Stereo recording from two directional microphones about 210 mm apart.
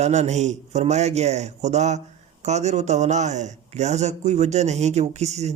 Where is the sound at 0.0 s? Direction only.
35° right (ahead or behind).